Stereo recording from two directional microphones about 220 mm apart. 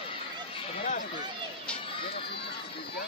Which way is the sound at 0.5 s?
35° left (ahead or behind).